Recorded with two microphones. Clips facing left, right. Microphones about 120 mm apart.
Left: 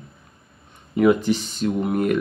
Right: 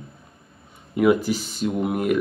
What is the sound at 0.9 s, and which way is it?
Speech, 5° right (ahead or behind).